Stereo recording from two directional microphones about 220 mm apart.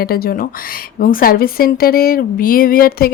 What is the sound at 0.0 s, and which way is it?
Speech, 45° left (ahead or behind).